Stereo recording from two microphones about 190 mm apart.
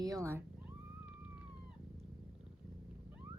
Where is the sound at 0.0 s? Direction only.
15° right (ahead or behind).